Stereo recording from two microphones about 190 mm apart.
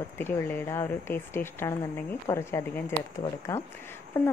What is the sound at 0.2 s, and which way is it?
Speech, 10° left (ahead or behind).